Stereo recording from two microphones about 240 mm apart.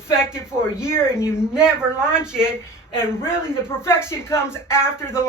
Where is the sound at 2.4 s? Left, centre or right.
Centre.